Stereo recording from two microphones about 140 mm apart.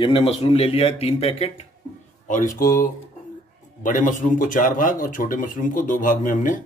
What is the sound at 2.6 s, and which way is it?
Speech, 90° left.